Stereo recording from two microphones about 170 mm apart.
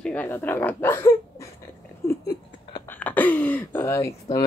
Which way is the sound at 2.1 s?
20° left (ahead or behind).